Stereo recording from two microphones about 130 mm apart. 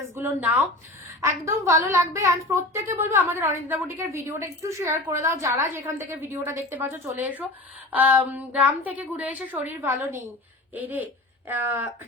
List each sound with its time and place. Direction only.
0.1 s a woman's voice: 15° right (ahead or behind)